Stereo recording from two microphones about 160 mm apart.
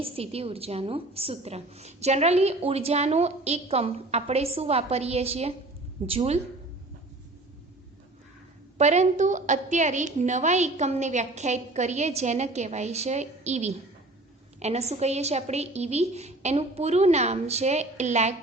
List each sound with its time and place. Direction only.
0.0 s a woman's voice: 35° right (ahead or behind)
8.8 s a woman's voice: 45° right (ahead or behind)